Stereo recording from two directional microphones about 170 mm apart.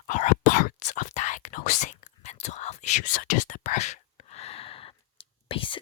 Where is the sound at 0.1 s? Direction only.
50° left (ahead or behind).